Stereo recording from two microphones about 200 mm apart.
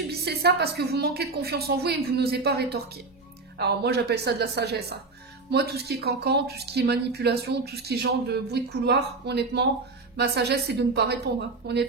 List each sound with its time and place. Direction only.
0.1 s a woman's voice: 55° right (ahead or behind)